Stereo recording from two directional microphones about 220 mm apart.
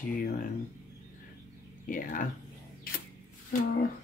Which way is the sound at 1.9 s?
35° left (ahead or behind).